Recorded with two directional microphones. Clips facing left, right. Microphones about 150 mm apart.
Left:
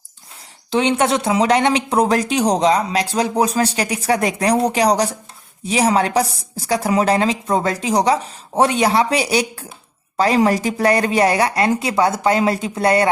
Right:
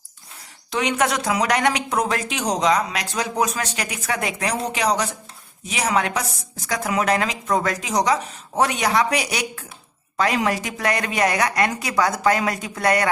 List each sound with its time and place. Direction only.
0.7 s a woman's voice: 30° left (ahead or behind)